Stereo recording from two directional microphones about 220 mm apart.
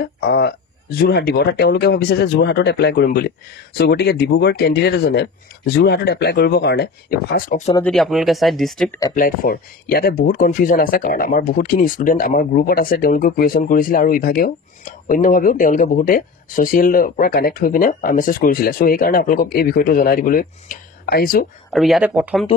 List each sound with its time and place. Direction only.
0.0 s speech: 45° left (ahead or behind)
7.8 s speech: centre (ahead or behind)
9.1 s speech: 40° left (ahead or behind)
21.7 s speech: centre (ahead or behind)